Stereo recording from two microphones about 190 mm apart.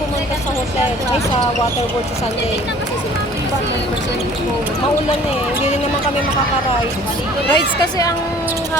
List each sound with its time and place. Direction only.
7.5 s speech: 20° left (ahead or behind)